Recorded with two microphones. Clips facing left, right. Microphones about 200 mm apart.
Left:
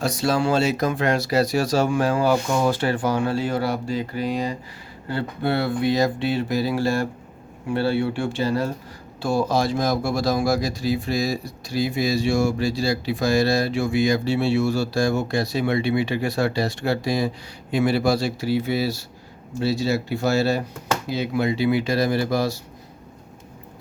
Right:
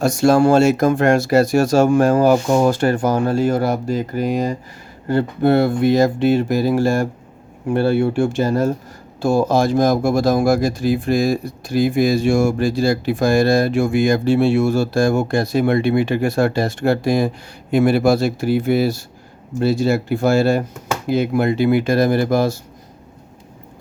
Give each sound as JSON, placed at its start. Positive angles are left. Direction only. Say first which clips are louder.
{"t": 0.0, "sound": "speech", "louder": "right 8 dB", "side_deg": -50}